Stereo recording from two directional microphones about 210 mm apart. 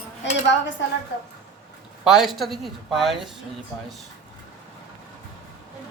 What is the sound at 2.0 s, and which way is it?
Speech, centre (ahead or behind).